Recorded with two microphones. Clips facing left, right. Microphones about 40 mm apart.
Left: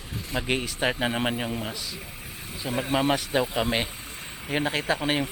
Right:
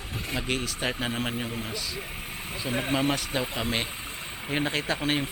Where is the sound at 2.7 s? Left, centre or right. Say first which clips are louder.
Left 1 dB; right.